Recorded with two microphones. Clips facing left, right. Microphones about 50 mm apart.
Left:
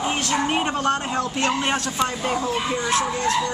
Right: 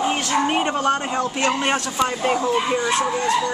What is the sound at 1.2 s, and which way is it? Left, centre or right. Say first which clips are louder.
Speech: right 2 dB; centre.